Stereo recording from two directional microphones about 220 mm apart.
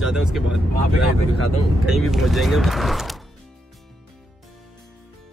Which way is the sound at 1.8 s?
Centre (ahead or behind).